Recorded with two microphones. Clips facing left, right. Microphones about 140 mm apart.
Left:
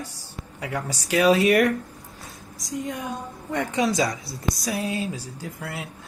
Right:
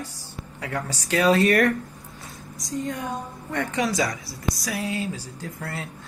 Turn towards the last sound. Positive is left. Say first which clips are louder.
# even
turn(degrees=10)  # may be behind; listen again after turning